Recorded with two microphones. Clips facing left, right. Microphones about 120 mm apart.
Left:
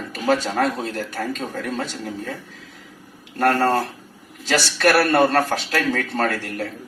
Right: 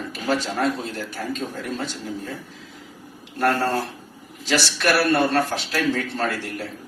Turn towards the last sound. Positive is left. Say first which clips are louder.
# left 3 dB
turn(degrees=55)  # may be behind; listen again after turning